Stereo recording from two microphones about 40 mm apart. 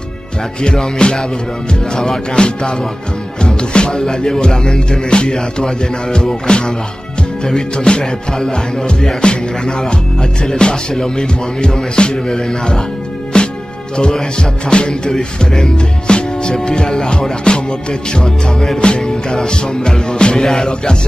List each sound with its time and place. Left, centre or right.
0.6 s music: left